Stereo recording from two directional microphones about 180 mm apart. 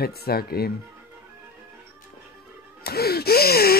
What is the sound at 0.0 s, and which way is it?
Speech, 60° left (ahead or behind).